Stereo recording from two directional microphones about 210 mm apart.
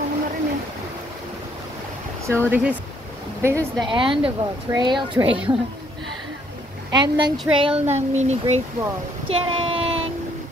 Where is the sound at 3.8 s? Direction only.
25° right (ahead or behind).